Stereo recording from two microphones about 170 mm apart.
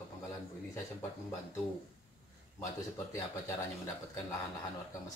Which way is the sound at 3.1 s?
20° left (ahead or behind).